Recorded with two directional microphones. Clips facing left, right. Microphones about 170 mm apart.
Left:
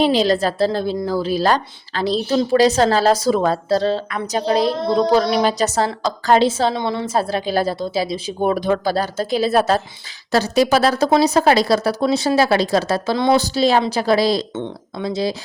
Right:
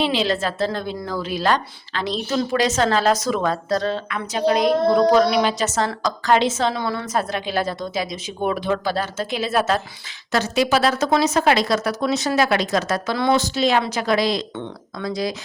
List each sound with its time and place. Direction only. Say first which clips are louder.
0.0 s a woman's voice: left 5 dB; 40° left (ahead or behind)
14.5 s speech: left 4 dB; 20° left (ahead or behind)